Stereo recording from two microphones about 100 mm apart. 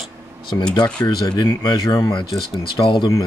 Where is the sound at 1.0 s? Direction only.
40° left (ahead or behind).